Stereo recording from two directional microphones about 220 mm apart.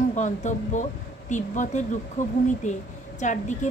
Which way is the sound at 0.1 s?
35° left (ahead or behind).